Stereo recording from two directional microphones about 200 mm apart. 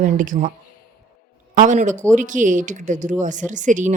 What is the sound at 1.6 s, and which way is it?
Speech, 40° right (ahead or behind).